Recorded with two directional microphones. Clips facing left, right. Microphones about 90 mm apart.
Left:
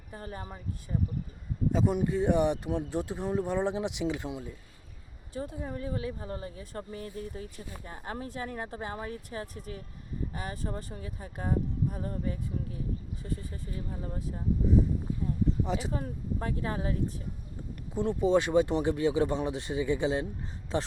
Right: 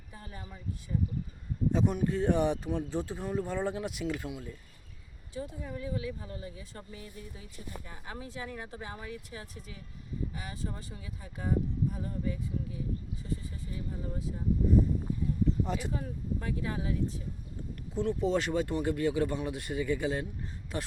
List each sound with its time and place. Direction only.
0.1 s speech: 40° left (ahead or behind)
1.7 s speech: 15° left (ahead or behind)
5.3 s speech: 45° left (ahead or behind)
15.9 s speech: 40° left (ahead or behind)
17.9 s speech: 20° left (ahead or behind)